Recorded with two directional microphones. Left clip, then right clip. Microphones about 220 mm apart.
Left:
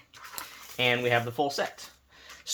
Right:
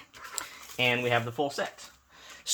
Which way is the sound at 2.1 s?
15° right (ahead or behind).